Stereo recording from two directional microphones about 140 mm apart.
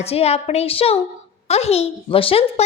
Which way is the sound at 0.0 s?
45° left (ahead or behind).